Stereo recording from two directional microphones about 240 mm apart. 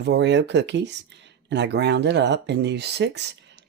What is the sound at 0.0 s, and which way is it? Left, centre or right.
Speech, right.